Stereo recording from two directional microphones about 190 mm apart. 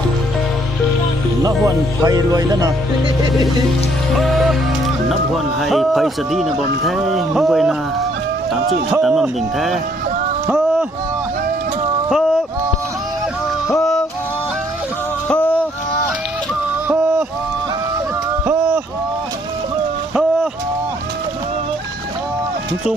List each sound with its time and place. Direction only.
1.5 s speech: 15° right (ahead or behind)
4.2 s music: centre (ahead or behind)
5.5 s speech: centre (ahead or behind)
8.9 s speech: centre (ahead or behind)
10.4 s a sound: 5° right (ahead or behind)
12.0 s a sound: centre (ahead or behind)
13.7 s yodeling: centre (ahead or behind)
15.3 s music: 10° left (ahead or behind)
16.9 s a sound: 5° right (ahead or behind)